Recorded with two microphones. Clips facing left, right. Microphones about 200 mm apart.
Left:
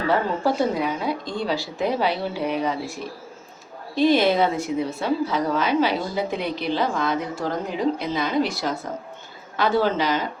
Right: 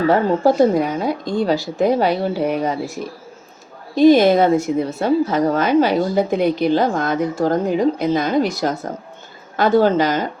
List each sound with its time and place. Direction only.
0.1 s a woman's voice: 45° right (ahead or behind)
3.9 s a woman's voice: 45° right (ahead or behind)